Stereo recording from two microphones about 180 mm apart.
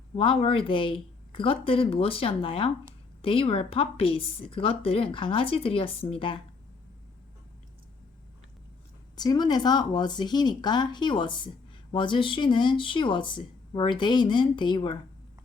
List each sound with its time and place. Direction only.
0.1 s a woman's voice: 30° left (ahead or behind)
9.1 s speech: 20° left (ahead or behind)